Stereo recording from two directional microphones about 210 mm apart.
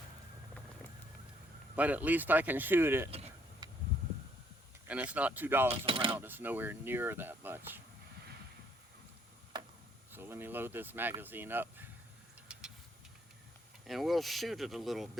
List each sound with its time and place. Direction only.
1.7 s speech: 5° right (ahead or behind)
3.1 s vehicle: 25° right (ahead or behind)
4.9 s speech: 5° right (ahead or behind)
5.8 s speech: 25° right (ahead or behind)
6.1 s speech: 10° right (ahead or behind)
10.1 s speech: 10° right (ahead or behind)
12.5 s vehicle: 5° right (ahead or behind)
13.8 s speech: centre (ahead or behind)